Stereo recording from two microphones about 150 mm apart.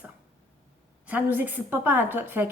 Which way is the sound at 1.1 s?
10° right (ahead or behind).